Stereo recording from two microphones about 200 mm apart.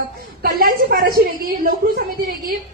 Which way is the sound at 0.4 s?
45° right (ahead or behind).